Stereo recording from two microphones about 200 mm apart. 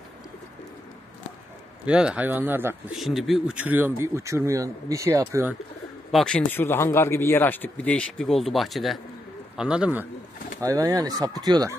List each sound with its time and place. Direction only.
1.9 s a man's voice: 5° right (ahead or behind)
6.1 s speech: 5° left (ahead or behind)
10.6 s speech: 15° right (ahead or behind)